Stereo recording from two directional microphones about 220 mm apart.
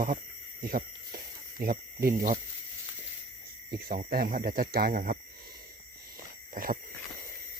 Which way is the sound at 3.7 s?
40° right (ahead or behind).